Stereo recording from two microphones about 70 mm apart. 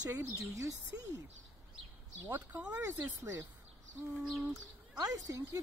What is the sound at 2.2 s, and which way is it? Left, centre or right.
Speech, right.